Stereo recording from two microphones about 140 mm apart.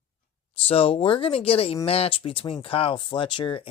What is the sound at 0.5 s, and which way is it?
Speech, 45° left (ahead or behind).